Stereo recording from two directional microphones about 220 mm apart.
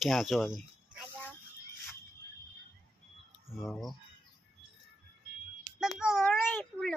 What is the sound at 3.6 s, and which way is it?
Speech, centre (ahead or behind).